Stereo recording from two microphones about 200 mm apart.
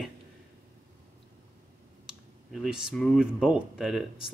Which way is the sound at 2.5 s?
Centre (ahead or behind).